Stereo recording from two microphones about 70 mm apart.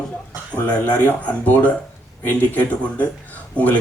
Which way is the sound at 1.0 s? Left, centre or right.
Left.